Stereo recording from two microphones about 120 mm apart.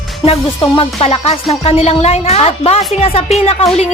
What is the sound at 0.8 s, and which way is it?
Speech, 55° left (ahead or behind).